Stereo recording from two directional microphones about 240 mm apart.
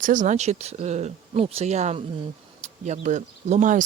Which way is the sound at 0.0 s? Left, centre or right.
Right.